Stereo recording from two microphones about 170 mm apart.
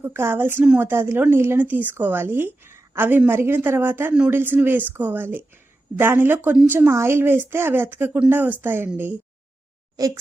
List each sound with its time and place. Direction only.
0.0 s a woman's voice: 15° right (ahead or behind)